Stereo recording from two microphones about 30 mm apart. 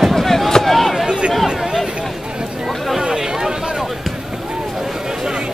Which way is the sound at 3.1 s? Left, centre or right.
Right.